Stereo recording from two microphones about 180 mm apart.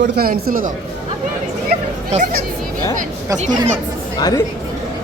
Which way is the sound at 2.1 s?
50° right (ahead or behind).